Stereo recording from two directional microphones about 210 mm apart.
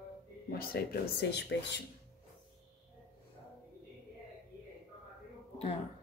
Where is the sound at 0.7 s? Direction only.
45° left (ahead or behind).